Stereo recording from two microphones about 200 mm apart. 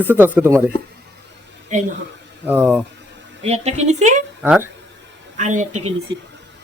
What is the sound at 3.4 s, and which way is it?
Speech, 30° right (ahead or behind).